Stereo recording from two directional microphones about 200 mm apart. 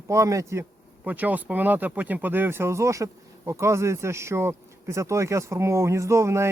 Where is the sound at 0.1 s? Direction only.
15° right (ahead or behind).